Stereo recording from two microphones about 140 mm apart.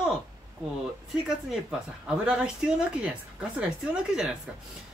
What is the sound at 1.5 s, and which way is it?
Speech, 5° right (ahead or behind).